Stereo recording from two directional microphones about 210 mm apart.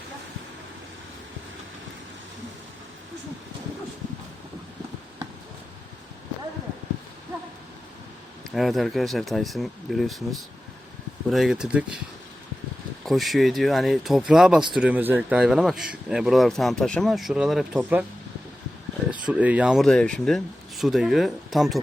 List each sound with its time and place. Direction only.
8.5 s speech: centre (ahead or behind)
11.3 s speech: centre (ahead or behind)
13.1 s speech: centre (ahead or behind)
19.2 s speech: 5° right (ahead or behind)